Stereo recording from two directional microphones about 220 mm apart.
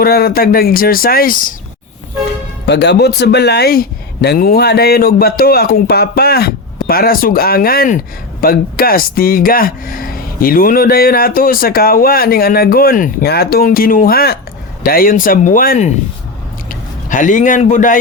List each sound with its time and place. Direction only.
0.0 s speech: 45° left (ahead or behind)
2.6 s speech: 50° left (ahead or behind); by 17.9 s 35° left (ahead or behind)